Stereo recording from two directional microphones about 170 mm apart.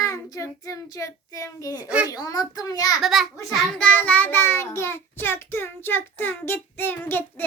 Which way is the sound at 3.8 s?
10° left (ahead or behind).